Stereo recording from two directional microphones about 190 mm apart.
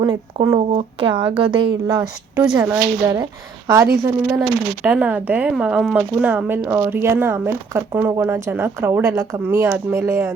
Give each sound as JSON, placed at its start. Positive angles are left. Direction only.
{"t": 0.0, "sound": "a woman's voice", "side_deg": -25}
{"t": 2.3, "sound": "speech", "side_deg": -5}
{"t": 2.7, "sound": "a woman's voice", "side_deg": -20}